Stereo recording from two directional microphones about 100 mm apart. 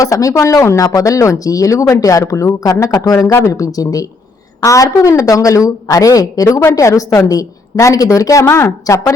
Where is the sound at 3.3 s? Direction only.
30° left (ahead or behind).